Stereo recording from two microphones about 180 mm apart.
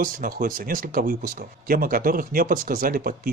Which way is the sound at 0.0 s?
50° right (ahead or behind).